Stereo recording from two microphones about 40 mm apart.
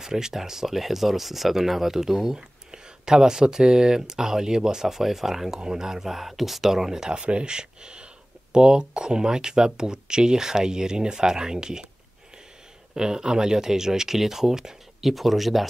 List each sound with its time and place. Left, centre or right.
0.0 s speech: centre
7.2 s speech: right
12.9 s speech: centre
15.0 s speech: centre